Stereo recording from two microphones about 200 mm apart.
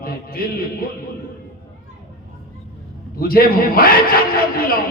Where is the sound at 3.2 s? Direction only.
50° left (ahead or behind).